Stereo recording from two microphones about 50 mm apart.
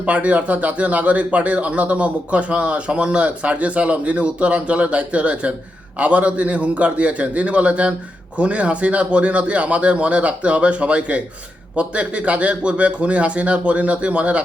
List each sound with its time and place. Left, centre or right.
0.0 s speech: right